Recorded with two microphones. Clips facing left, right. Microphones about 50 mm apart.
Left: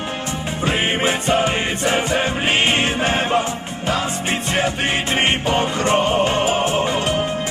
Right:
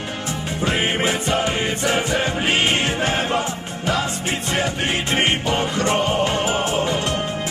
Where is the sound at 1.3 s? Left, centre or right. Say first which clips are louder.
Left 2 dB; centre.